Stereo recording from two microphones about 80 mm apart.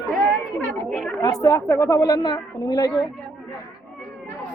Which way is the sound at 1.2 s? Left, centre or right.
Left.